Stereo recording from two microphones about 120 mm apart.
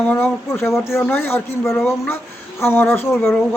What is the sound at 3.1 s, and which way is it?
Speech, 5° left (ahead or behind).